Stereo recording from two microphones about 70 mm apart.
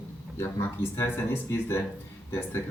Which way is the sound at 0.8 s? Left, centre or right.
Left.